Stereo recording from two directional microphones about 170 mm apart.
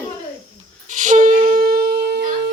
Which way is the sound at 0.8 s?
45° right (ahead or behind).